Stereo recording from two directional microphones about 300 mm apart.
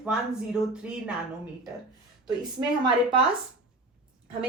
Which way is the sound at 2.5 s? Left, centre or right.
Centre.